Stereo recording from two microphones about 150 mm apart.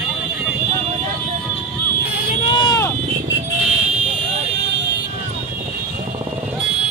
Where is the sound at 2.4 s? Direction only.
30° left (ahead or behind).